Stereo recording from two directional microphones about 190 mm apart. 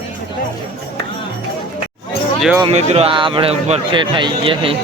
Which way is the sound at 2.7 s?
30° right (ahead or behind).